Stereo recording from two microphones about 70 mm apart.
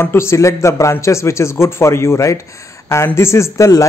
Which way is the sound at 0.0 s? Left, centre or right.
Left.